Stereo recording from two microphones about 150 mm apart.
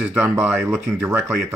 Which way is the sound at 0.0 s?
5° right (ahead or behind).